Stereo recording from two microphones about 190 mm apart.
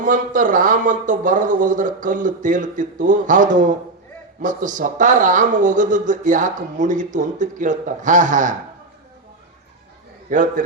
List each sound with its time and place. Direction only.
0.0 s speech: 45° right (ahead or behind)
10.2 s speech: 45° right (ahead or behind)